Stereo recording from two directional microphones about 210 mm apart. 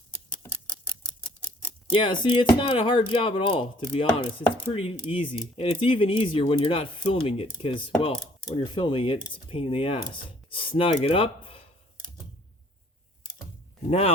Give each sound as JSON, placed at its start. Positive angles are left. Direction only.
{"t": 1.5, "sound": "speech", "side_deg": 20}